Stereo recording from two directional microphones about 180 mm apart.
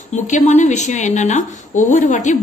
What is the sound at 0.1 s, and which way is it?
A woman's voice, 40° left (ahead or behind).